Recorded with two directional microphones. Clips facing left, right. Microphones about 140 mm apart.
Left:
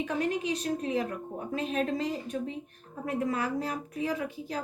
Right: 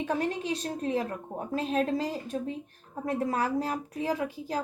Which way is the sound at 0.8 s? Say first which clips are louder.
Right 1 dB; 35° right (ahead or behind).